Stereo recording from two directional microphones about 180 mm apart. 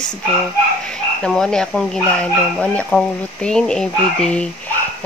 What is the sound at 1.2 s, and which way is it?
Speech, 5° left (ahead or behind).